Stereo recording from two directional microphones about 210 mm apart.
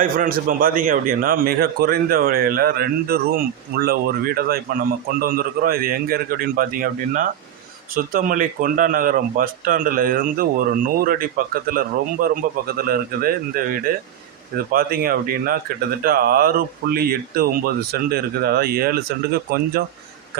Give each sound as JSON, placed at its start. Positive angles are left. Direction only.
{"t": 0.0, "sound": "a man's voice", "side_deg": -40}